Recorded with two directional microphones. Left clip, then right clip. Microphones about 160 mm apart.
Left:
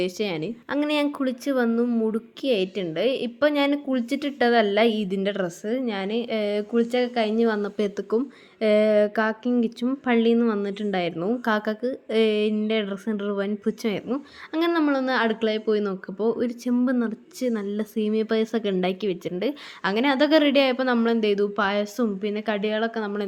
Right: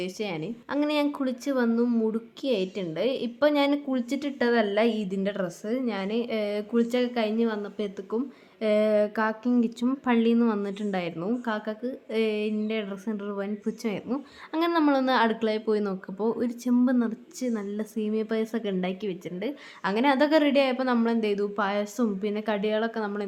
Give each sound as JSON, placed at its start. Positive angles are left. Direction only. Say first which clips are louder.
{"t": 0.0, "sound": "a woman's voice", "louder": "left 5 dB", "side_deg": 25}
{"t": 7.3, "sound": "speech", "louder": "left 5 dB", "side_deg": 45}
{"t": 8.6, "sound": "speech", "louder": "left 4 dB", "side_deg": 20}
{"t": 11.4, "sound": "a woman's voice", "louder": "left 6 dB", "side_deg": 45}
{"t": 14.5, "sound": "speech", "louder": "left 1 dB", "side_deg": 10}
{"t": 17.4, "sound": "a woman's voice", "louder": "left 5 dB", "side_deg": 25}